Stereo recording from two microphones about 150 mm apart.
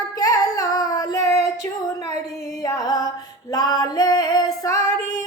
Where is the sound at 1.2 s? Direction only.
20° left (ahead or behind).